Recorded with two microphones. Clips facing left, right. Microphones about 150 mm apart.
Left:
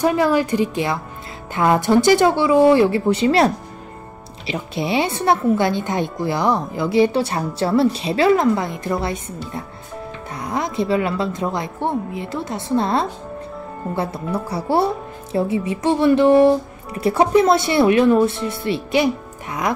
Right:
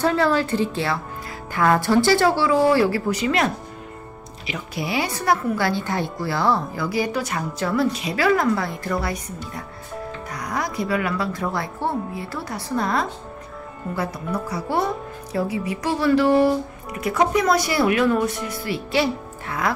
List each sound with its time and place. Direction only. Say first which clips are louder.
0.0 s a woman's voice: left 3 dB; 15° left (ahead or behind)